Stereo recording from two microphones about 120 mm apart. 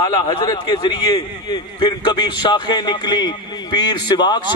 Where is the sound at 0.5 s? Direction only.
40° left (ahead or behind).